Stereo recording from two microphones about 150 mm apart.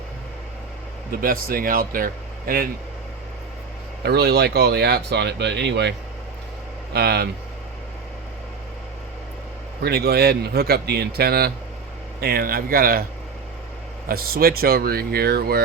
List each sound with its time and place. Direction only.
1.1 s speech: 75° right (ahead or behind)
4.0 s speech: 90° right
6.9 s speech: 90° right
9.8 s speech: 90° right
14.1 s speech: 90° right